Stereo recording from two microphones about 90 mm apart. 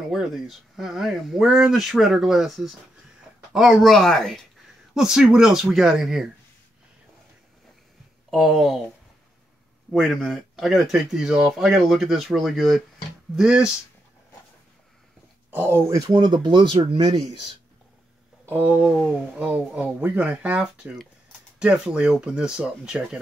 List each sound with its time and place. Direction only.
0.1 s speech: 5° right (ahead or behind)
8.3 s speech: 5° right (ahead or behind)
9.9 s speech: 5° left (ahead or behind)
15.9 s speech: 50° right (ahead or behind); by 17.0 s 70° right (ahead or behind)
17.0 s speech: 50° right (ahead or behind)
18.4 s speech: 25° right (ahead or behind)